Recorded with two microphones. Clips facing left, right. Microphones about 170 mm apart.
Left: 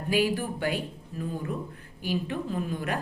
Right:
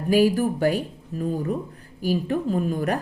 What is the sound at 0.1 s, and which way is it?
Speech, 40° right (ahead or behind).